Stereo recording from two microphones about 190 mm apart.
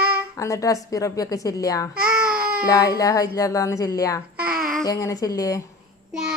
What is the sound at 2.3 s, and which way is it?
Baby cry, 50° right (ahead or behind).